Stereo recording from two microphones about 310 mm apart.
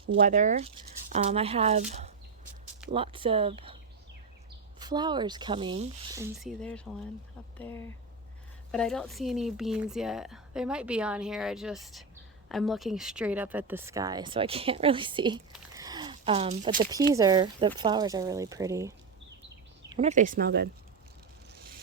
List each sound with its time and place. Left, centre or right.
0.2 s speech: right
4.8 s speech: centre
15.7 s a sound: centre
17.2 s speech: centre
19.9 s speech: right